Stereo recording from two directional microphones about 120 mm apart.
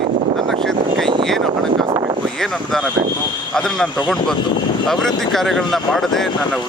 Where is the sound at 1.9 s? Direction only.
40° right (ahead or behind).